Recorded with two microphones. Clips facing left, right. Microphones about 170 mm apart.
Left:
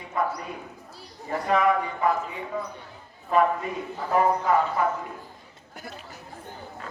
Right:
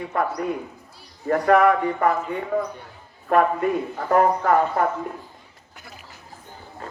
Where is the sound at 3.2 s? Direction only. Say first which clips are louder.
Right 4 dB; 60° right (ahead or behind).